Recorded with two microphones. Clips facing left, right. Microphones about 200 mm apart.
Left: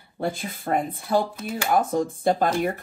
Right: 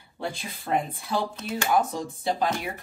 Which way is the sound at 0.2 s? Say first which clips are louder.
Left 6 dB; 50° left (ahead or behind).